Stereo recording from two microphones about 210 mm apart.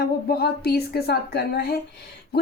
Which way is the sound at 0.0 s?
50° left (ahead or behind).